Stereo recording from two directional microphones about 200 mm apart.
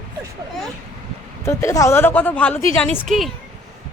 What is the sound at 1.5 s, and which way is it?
A woman's voice, 15° left (ahead or behind).